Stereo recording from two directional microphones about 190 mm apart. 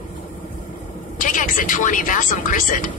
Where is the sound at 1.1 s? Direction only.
45° left (ahead or behind).